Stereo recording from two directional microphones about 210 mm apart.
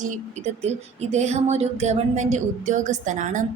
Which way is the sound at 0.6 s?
30° right (ahead or behind).